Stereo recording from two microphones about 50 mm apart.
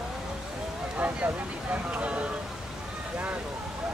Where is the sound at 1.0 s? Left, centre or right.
Right.